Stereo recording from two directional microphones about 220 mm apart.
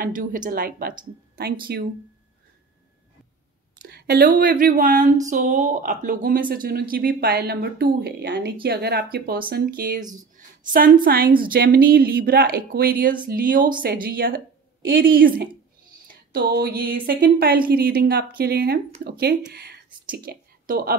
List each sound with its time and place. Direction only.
0.0 s speech: 40° right (ahead or behind)
3.8 s speech: 45° right (ahead or behind)